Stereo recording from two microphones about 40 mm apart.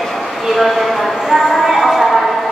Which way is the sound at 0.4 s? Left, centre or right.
Centre.